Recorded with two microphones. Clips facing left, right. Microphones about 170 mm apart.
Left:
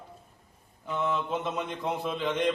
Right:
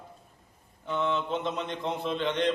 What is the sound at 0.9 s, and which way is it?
A man's voice, 5° left (ahead or behind).